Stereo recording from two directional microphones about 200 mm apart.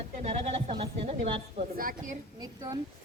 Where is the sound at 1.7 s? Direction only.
40° right (ahead or behind).